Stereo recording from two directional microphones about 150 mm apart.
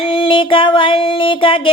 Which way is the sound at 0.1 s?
35° left (ahead or behind).